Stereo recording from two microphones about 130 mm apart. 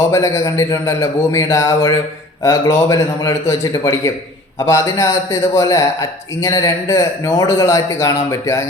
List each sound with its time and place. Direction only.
0.1 s a man's voice: 25° left (ahead or behind)